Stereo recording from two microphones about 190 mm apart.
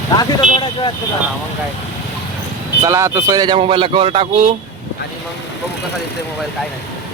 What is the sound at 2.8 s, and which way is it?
Speech, 15° right (ahead or behind).